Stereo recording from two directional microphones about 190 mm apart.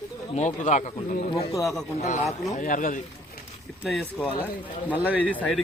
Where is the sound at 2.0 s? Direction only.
40° left (ahead or behind).